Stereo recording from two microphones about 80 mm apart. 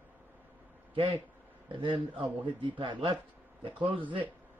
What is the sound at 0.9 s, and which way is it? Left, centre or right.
A man's voice, right.